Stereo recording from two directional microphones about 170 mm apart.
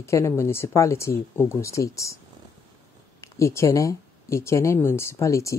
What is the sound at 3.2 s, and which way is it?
A woman's voice, 15° left (ahead or behind).